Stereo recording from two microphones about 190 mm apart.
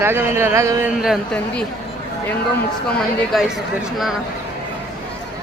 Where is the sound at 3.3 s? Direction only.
Centre (ahead or behind).